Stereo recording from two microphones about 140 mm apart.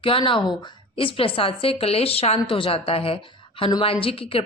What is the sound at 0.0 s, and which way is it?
A woman's voice, 40° left (ahead or behind).